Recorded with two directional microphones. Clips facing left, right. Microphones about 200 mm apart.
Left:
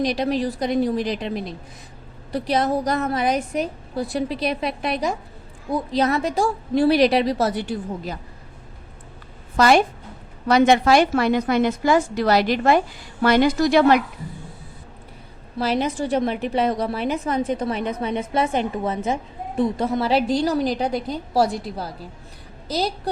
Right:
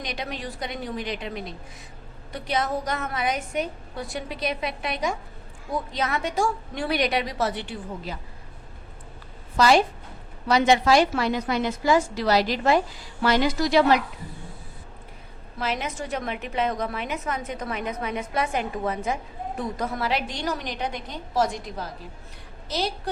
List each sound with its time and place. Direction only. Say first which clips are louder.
0.0 s a woman's voice: left 11 dB; 35° left (ahead or behind)
9.6 s a woman's voice: left 3 dB; 55° left (ahead or behind)
15.5 s a woman's voice: left 7 dB; 35° left (ahead or behind)